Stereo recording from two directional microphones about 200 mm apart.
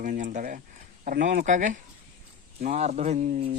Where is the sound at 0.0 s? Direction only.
40° right (ahead or behind).